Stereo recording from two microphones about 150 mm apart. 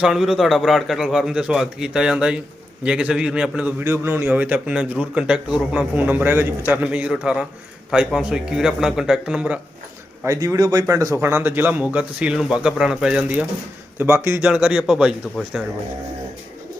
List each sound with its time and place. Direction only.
0.0 s a man's voice: 5° right (ahead or behind)
10.2 s a man's voice: 20° right (ahead or behind)